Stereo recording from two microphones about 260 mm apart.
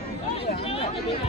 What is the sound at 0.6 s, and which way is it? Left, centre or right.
Chatter, left.